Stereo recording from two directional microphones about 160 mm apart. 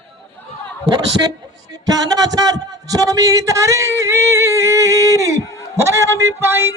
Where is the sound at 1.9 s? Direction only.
25° right (ahead or behind).